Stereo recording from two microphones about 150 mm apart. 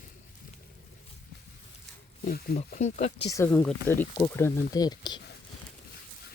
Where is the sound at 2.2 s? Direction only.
90° left.